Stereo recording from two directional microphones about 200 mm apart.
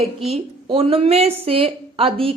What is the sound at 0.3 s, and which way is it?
A woman's voice, 30° right (ahead or behind).